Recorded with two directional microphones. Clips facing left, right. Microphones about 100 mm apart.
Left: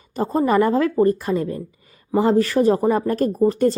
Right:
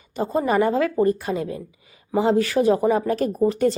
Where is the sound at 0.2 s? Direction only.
40° left (ahead or behind).